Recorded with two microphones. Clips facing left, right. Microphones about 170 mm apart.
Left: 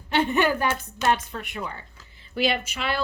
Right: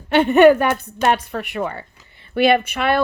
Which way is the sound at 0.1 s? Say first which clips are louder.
Right 11 dB; 65° right (ahead or behind).